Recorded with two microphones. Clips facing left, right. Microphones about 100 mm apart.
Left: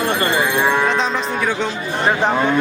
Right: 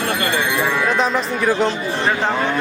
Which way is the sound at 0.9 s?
5° right (ahead or behind).